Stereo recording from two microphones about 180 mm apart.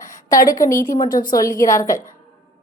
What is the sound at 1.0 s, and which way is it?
Speech, 50° left (ahead or behind).